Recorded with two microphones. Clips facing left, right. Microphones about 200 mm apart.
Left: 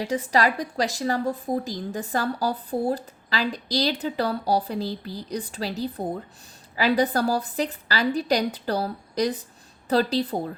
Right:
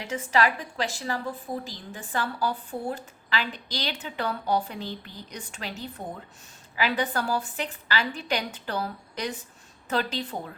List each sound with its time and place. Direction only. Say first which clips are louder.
0.0 s a woman's voice: left 3 dB; 35° left (ahead or behind)